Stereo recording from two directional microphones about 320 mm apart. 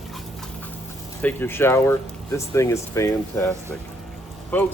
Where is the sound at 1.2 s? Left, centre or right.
Centre.